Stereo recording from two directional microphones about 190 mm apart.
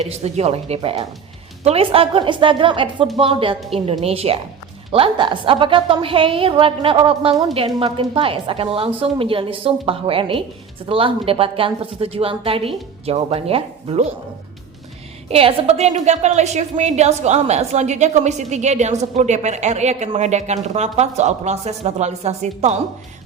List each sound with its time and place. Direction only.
0.0 s a woman's voice: 35° right (ahead or behind)
15.3 s a woman's voice: 30° right (ahead or behind)